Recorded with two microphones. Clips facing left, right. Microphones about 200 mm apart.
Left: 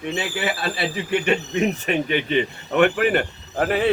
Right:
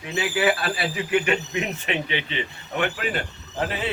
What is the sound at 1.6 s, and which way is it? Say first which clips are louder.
Speech: left 6 dB; 45° left (ahead or behind).